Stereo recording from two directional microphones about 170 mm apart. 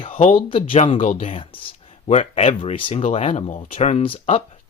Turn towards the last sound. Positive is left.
turn(degrees=35)  # may be behind; listen again after turning